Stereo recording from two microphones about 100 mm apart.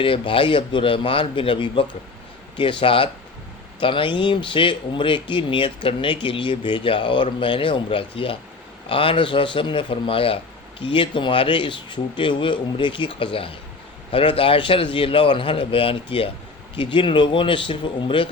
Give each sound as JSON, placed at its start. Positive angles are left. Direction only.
{"t": 0.0, "sound": "speech", "side_deg": 60}